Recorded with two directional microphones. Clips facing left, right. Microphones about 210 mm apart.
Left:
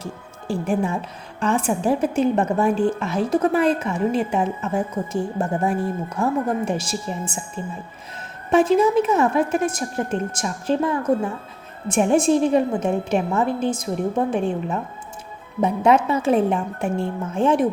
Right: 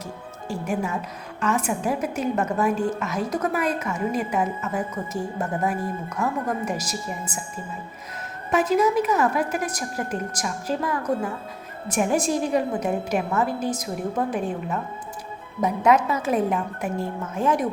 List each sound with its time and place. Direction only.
0.0 s music: 30° left (ahead or behind)
1.4 s a woman's voice: 30° left (ahead or behind)